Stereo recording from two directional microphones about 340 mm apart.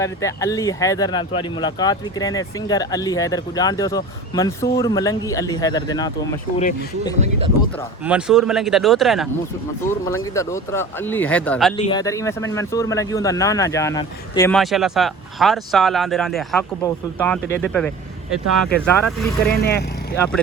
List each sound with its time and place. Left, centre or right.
0.0 s speech: centre
7.2 s speech: centre
8.0 s speech: centre
10.3 s speech: centre
19.5 s speech: left
20.1 s speech: centre